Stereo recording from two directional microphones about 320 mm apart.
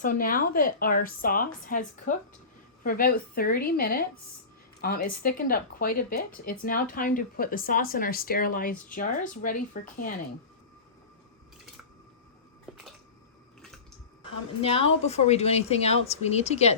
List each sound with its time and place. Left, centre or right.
0.0 s a woman's voice: left
14.6 s a woman's voice: centre